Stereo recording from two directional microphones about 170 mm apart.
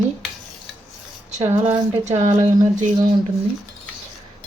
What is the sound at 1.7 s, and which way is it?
Speech, 35° right (ahead or behind).